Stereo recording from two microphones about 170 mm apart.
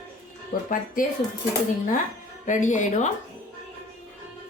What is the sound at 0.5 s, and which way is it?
Speech, 55° left (ahead or behind).